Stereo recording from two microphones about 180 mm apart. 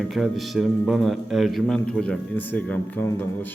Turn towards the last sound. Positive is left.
turn(degrees=10)  # may be behind; listen again after turning